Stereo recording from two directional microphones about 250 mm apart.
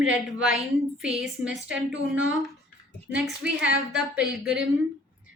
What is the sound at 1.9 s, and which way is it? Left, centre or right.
Speech, right.